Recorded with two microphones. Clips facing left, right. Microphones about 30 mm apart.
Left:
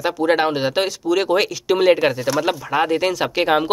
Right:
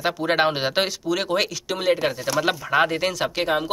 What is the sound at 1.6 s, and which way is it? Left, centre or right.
Speech, left.